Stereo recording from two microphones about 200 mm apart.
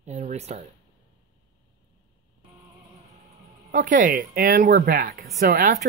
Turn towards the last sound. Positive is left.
turn(degrees=-50)  # may be behind; listen again after turning